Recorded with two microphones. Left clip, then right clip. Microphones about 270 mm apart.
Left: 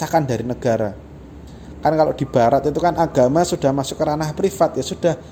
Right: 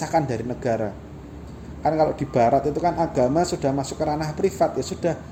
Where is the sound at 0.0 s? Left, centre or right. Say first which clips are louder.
Left 4 dB; left.